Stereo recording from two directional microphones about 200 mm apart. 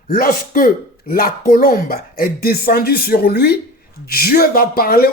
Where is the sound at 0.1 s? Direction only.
45° left (ahead or behind).